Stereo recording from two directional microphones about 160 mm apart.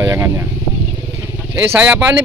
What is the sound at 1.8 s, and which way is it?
Speech, 5° right (ahead or behind).